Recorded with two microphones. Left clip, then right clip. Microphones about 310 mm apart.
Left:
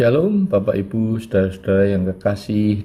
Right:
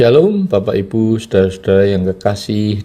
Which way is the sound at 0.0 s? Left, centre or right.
Right.